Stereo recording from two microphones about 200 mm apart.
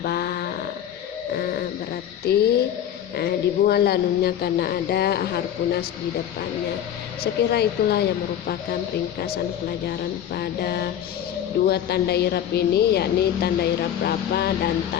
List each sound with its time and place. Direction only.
0.0 s mantra: 50° left (ahead or behind)
2.2 s a woman's voice: 55° left (ahead or behind)
7.5 s a woman's voice: 55° left (ahead or behind)
9.1 s a woman's voice: 50° left (ahead or behind)